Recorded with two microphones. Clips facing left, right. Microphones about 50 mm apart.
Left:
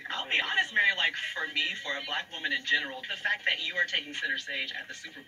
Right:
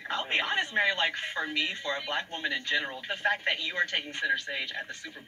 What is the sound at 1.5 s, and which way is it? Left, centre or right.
A woman's voice, centre.